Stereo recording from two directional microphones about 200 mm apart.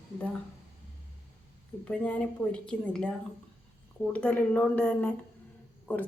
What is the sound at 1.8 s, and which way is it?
A woman's voice, 5° left (ahead or behind).